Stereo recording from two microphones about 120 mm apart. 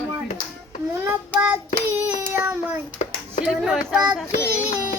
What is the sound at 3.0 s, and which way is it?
Clapping, 70° left (ahead or behind).